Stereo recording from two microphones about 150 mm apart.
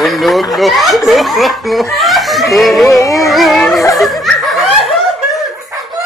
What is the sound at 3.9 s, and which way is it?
Snicker, centre (ahead or behind).